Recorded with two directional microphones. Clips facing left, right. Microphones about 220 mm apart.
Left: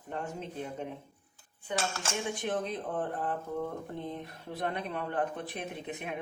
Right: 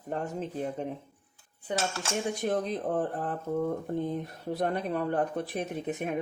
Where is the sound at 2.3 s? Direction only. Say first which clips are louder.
Right 4 dB; 40° right (ahead or behind).